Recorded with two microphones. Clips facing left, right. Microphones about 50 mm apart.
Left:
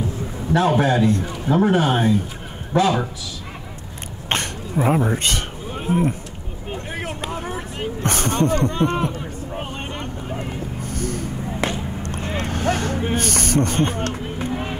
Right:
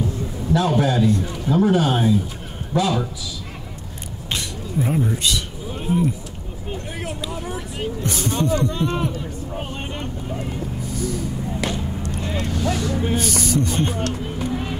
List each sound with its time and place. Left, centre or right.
0.5 s speech: left
2.7 s a man's voice: left
4.3 s speech: left
5.7 s a sound: centre
7.0 s a sound: left
9.9 s vehicle: left
10.8 s vehicle: left
11.6 s a sound: left
12.2 s vehicle: left
12.4 s speech: left
14.4 s run: left